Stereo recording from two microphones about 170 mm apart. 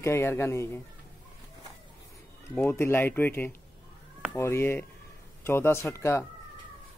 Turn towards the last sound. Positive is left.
turn(degrees=15)  # may be behind; listen again after turning